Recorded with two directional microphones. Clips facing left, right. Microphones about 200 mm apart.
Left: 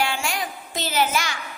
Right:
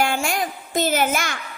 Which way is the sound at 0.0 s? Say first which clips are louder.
Right 4 dB; 45° right (ahead or behind).